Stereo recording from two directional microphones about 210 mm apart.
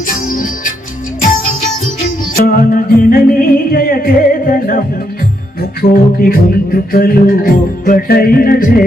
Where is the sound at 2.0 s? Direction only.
40° left (ahead or behind).